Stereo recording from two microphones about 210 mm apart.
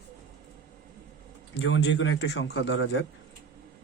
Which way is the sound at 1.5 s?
60° left (ahead or behind).